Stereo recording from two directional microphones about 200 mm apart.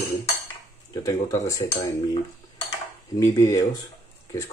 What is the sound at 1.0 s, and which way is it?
Speech, 15° left (ahead or behind).